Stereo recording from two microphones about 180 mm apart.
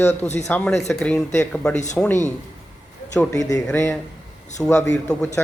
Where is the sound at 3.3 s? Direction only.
20° left (ahead or behind).